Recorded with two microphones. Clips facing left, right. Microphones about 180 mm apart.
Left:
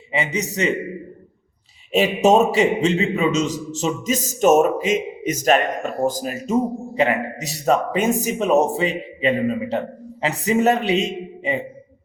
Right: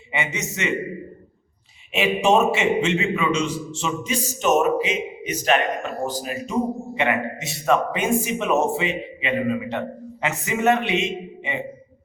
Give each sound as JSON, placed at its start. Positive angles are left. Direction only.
{"t": 0.1, "sound": "a man's voice", "side_deg": 35}
{"t": 1.9, "sound": "a man's voice", "side_deg": 40}